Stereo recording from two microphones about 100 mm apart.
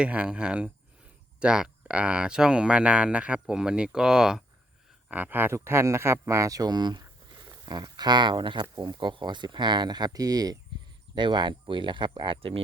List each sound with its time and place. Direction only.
0.0 s speech: 10° right (ahead or behind)
5.0 s speech: 15° right (ahead or behind); by 10.6 s 40° right (ahead or behind)
11.1 s speech: 50° right (ahead or behind)